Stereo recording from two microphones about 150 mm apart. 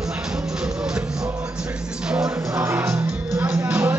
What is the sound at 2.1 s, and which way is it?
Music, 10° right (ahead or behind).